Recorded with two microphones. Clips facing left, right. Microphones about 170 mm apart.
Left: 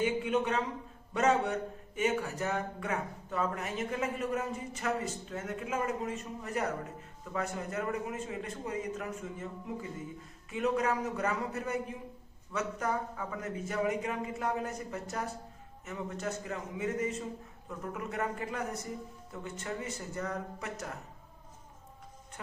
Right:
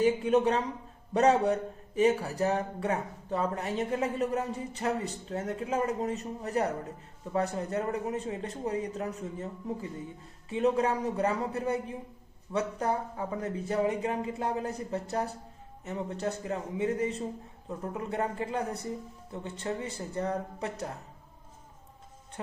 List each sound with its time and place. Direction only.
0.0 s speech: 35° right (ahead or behind)